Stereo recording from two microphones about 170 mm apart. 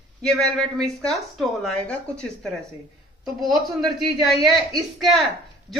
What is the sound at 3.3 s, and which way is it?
Speech, centre (ahead or behind).